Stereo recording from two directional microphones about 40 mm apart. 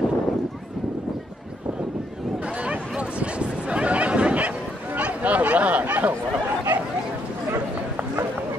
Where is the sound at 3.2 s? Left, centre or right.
Right.